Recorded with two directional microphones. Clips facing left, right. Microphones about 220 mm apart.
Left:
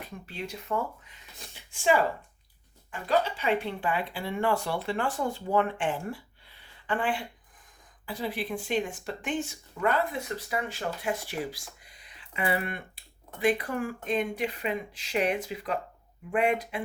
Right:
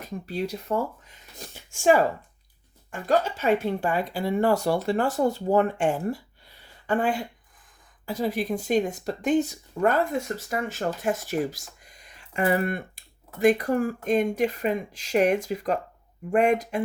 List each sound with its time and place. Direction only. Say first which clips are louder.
0.0 s speech: right 8 dB; 40° right (ahead or behind)